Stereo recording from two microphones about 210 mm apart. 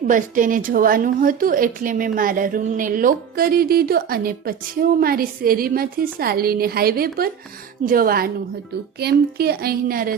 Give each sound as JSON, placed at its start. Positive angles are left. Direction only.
{"t": 0.1, "sound": "a woman's voice", "side_deg": -40}